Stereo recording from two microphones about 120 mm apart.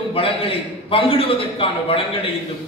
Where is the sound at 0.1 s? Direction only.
50° left (ahead or behind).